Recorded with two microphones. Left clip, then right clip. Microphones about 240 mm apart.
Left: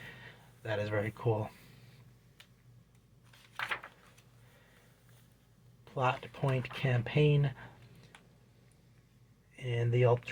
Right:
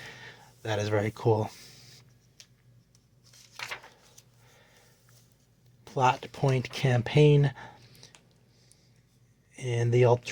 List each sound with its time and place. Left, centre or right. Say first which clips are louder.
0.0 s a sound: right 5 dB; right
5.8 s speech: right 7 dB; right
9.6 s speech: right 6 dB; right